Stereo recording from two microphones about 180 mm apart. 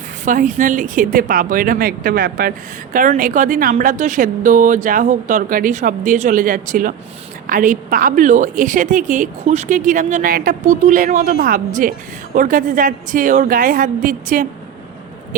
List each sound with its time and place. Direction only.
0.3 s a woman's voice: 45° right (ahead or behind)